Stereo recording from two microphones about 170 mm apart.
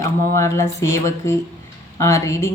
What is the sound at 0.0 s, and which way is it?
Speech, 15° left (ahead or behind).